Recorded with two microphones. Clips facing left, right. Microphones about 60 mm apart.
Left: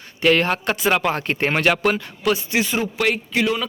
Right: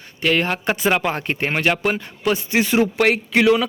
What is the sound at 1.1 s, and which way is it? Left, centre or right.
Speech, centre.